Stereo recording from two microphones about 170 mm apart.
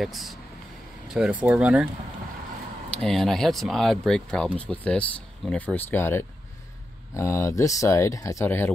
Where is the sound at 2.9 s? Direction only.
Centre (ahead or behind).